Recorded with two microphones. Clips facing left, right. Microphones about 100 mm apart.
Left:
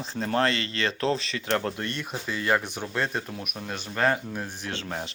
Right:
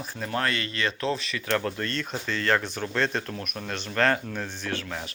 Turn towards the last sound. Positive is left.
turn(degrees=30)  # may be behind; listen again after turning